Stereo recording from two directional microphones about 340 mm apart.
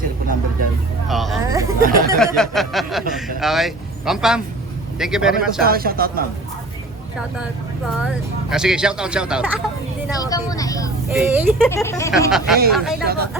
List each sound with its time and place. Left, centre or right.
1.0 s speech: centre
1.8 s speech: right
2.1 s speech: centre
5.6 s speech: right
8.0 s speech: centre
10.1 s speech: centre
11.1 s speech: centre